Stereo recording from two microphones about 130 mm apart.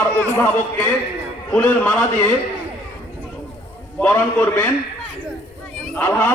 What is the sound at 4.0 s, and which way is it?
Speech, 15° left (ahead or behind).